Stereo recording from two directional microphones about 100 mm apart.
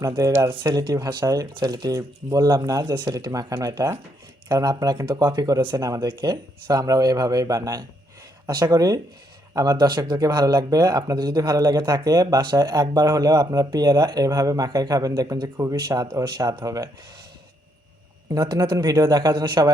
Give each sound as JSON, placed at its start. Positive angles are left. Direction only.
{"t": 0.2, "sound": "speech", "side_deg": -30}
{"t": 18.3, "sound": "speech", "side_deg": -40}